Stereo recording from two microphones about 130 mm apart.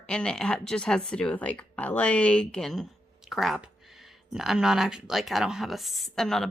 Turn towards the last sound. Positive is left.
turn(degrees=5)  # may be behind; listen again after turning